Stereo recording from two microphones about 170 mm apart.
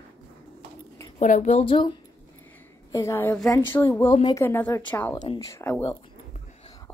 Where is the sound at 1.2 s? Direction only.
45° left (ahead or behind).